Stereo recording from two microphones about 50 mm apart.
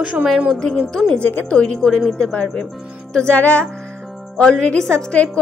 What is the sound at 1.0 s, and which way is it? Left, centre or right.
Speech, left.